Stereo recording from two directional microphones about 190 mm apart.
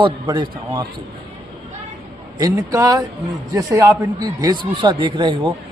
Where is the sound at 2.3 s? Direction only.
20° right (ahead or behind).